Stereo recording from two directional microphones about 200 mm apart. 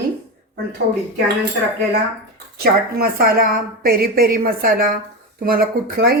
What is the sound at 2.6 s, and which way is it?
A woman's voice, 50° right (ahead or behind).